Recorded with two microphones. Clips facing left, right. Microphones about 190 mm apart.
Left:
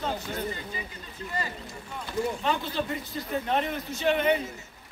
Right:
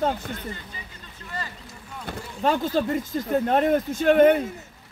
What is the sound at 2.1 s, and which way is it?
Speech, 45° right (ahead or behind).